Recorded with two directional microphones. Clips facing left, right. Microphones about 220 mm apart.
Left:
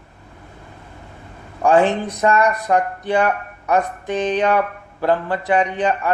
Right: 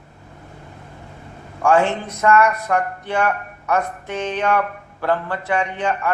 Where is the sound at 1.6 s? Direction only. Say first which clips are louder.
Left 2 dB; 15° left (ahead or behind).